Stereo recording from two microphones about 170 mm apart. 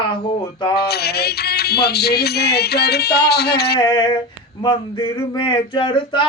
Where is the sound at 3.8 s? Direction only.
25° left (ahead or behind).